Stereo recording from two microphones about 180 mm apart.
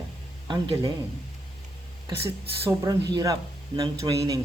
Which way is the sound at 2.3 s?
20° right (ahead or behind).